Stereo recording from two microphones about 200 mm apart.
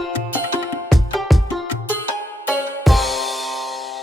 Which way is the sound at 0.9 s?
Centre (ahead or behind).